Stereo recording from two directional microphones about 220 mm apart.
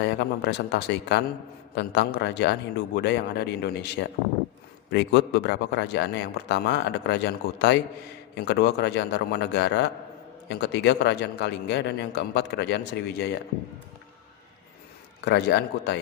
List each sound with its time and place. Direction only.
0.0 s a man's voice: 50° left (ahead or behind)
15.2 s a man's voice: 50° left (ahead or behind)